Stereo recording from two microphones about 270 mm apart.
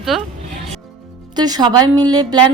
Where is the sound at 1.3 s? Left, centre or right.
Centre.